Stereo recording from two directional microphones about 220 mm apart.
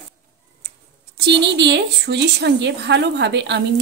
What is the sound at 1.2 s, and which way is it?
A woman's voice, 50° right (ahead or behind).